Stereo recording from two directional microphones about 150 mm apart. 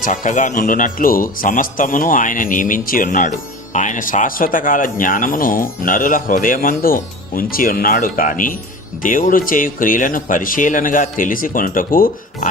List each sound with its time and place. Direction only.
0.0 s a man's voice: 60° left (ahead or behind)